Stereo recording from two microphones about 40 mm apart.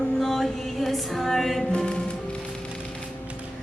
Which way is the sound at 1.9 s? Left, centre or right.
Left.